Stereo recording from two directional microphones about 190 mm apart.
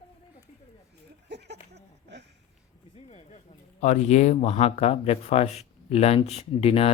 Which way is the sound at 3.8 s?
40° left (ahead or behind).